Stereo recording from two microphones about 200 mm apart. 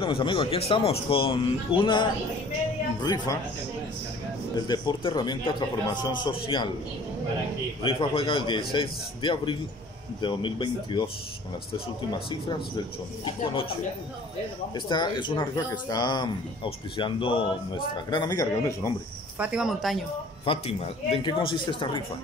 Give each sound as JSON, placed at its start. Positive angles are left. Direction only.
{"t": 0.0, "sound": "speech", "side_deg": 25}
{"t": 4.6, "sound": "speech", "side_deg": 20}
{"t": 7.8, "sound": "speech", "side_deg": 25}
{"t": 12.1, "sound": "speech", "side_deg": 25}
{"t": 14.9, "sound": "speech", "side_deg": 25}
{"t": 19.3, "sound": "speech", "side_deg": -5}
{"t": 20.4, "sound": "speech", "side_deg": 30}